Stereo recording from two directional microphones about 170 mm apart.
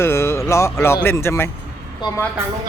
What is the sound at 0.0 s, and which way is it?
A woman's voice, 15° left (ahead or behind).